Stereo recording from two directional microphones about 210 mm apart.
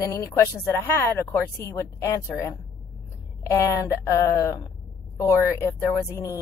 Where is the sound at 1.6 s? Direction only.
15° left (ahead or behind).